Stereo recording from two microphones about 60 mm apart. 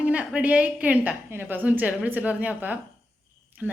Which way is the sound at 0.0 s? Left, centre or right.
Right.